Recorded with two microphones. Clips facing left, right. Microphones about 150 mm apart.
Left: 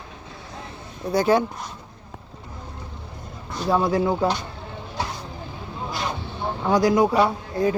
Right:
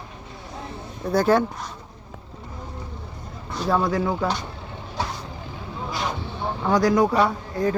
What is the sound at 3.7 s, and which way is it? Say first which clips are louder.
Speech: left 1 dB; 25° left (ahead or behind).